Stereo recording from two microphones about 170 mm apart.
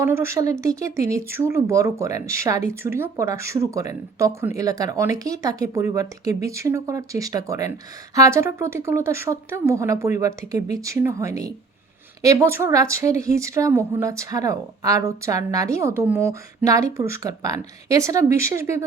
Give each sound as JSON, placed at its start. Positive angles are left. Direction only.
{"t": 0.0, "sound": "speech", "side_deg": -15}